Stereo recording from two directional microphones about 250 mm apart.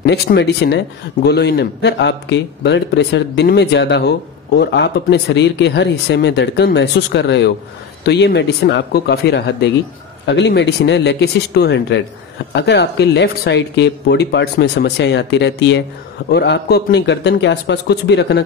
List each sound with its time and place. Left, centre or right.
0.0 s speech: left